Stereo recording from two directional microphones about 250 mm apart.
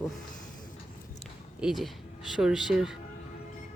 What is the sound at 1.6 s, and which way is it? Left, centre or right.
Speech, centre.